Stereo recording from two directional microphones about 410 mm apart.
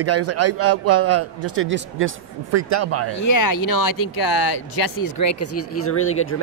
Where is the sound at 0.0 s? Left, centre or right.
Right.